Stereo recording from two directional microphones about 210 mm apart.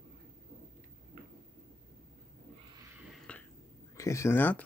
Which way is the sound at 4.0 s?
15° left (ahead or behind).